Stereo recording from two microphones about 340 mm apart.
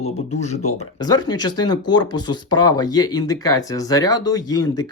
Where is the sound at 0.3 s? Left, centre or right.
Centre.